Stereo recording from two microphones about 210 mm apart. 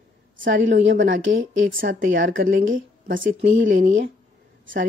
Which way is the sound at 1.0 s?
65° right (ahead or behind).